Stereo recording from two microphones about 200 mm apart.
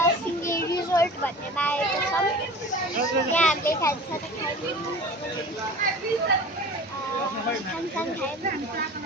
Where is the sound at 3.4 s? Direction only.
10° left (ahead or behind).